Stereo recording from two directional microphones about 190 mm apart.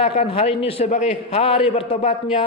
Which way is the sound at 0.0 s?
30° left (ahead or behind).